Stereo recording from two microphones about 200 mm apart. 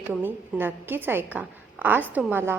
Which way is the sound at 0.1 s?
10° right (ahead or behind).